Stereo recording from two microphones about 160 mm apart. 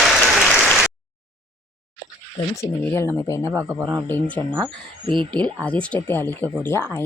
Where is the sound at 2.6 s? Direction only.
15° left (ahead or behind).